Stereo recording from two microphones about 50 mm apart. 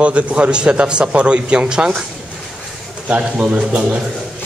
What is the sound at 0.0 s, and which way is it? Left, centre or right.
A man's voice, right.